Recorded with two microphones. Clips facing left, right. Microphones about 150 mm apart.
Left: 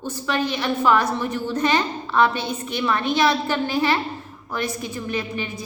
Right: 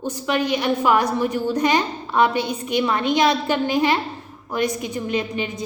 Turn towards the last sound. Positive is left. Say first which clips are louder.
# right 3 dB
turn(degrees=-20)  # may be behind; listen again after turning